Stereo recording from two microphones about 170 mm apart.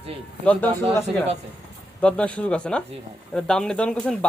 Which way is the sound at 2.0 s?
5° left (ahead or behind).